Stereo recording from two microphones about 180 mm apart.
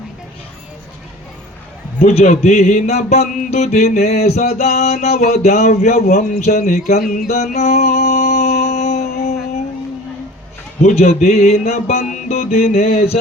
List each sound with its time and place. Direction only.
2.0 s speech: 35° left (ahead or behind)
7.1 s music: 40° left (ahead or behind)
10.8 s speech: 40° left (ahead or behind)